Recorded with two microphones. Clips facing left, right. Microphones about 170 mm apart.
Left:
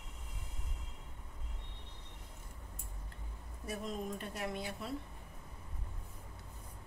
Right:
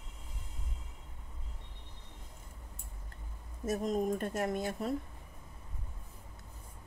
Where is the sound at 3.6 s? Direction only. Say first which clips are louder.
Right 9 dB; 45° right (ahead or behind).